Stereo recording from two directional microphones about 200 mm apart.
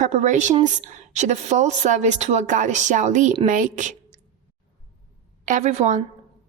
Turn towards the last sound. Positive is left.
turn(degrees=-35)  # may be behind; listen again after turning